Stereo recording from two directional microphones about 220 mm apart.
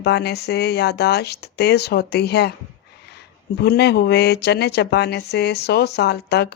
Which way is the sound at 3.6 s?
50° left (ahead or behind).